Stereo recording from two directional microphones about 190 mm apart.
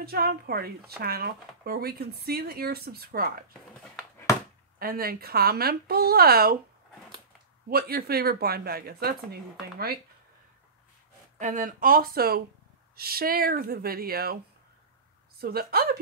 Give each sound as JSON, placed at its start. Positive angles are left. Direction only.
{"t": 0.0, "sound": "speech", "side_deg": -55}
{"t": 4.7, "sound": "speech", "side_deg": -50}
{"t": 7.7, "sound": "speech", "side_deg": -55}
{"t": 11.3, "sound": "speech", "side_deg": -45}
{"t": 15.4, "sound": "speech", "side_deg": -55}